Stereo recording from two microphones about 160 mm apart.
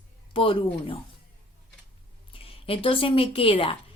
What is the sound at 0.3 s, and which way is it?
Speech, 30° left (ahead or behind).